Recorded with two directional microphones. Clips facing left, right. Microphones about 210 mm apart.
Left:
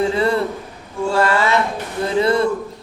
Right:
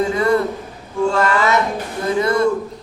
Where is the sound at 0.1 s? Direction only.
30° left (ahead or behind).